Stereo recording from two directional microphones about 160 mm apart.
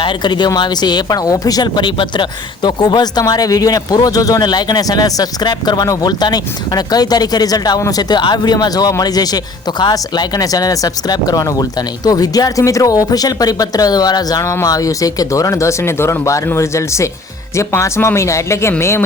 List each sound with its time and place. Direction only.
0.0 s speech: 30° left (ahead or behind)